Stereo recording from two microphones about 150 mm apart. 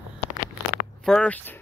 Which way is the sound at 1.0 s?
5° left (ahead or behind).